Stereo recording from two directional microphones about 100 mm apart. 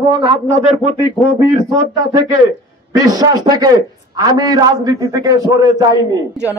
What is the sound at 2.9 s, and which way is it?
A man's voice, 35° right (ahead or behind).